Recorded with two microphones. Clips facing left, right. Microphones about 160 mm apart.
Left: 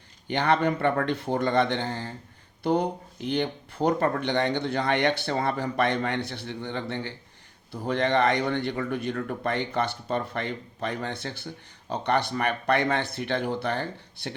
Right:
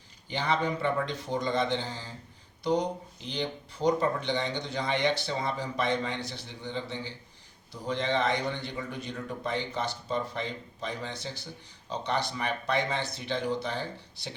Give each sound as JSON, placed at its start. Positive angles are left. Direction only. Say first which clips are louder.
{"t": 0.3, "sound": "a man's voice", "louder": "left 6 dB", "side_deg": 65}